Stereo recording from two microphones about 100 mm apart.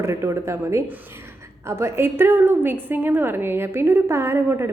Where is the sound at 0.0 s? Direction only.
30° right (ahead or behind).